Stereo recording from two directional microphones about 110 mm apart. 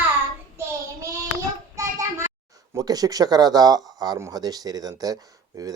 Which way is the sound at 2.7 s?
35° right (ahead or behind).